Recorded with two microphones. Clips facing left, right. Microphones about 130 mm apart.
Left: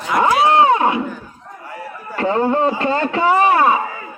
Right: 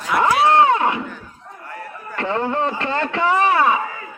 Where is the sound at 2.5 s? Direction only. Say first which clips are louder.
Left 4 dB; 10° left (ahead or behind).